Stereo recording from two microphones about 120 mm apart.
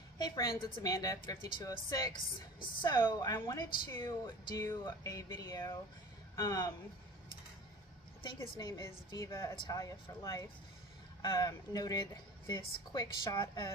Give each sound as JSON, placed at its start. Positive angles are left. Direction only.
{"t": 0.2, "sound": "a woman's voice", "side_deg": 35}
{"t": 8.4, "sound": "a woman's voice", "side_deg": 30}